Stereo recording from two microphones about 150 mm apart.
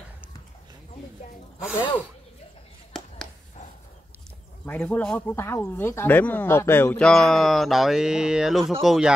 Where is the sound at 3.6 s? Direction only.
50° left (ahead or behind).